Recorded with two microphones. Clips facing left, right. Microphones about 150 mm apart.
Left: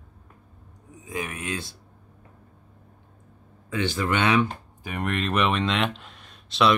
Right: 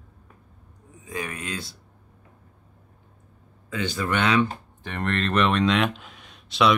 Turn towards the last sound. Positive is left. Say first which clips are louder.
# even
turn(degrees=0)  # may be behind; listen again after turning